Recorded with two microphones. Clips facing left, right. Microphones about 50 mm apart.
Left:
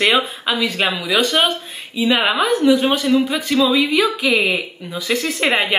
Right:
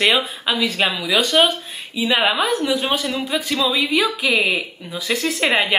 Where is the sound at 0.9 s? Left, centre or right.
Centre.